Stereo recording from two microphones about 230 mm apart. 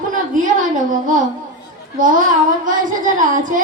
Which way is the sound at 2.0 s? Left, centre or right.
Right.